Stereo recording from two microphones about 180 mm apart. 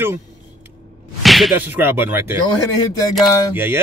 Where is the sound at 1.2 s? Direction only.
Centre (ahead or behind).